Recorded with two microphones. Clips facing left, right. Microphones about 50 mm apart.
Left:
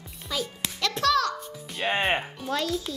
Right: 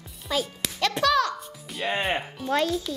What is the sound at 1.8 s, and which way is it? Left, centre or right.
Speech, centre.